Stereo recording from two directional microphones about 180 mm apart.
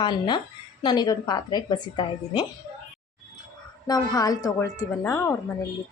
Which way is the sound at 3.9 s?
20° left (ahead or behind).